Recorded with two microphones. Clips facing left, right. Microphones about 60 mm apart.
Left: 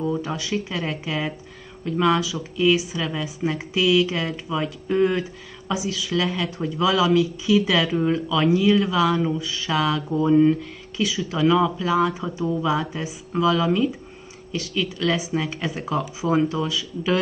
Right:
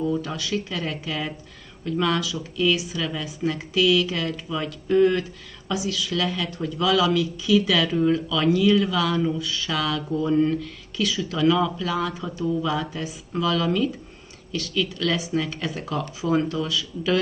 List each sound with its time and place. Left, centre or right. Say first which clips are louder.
0.1 s speech: left 1 dB; centre